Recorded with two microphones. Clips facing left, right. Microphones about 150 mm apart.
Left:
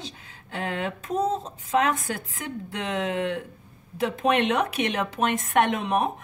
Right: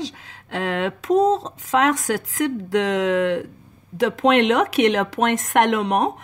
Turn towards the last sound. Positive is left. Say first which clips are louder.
# right 5 dB
turn(degrees=-80)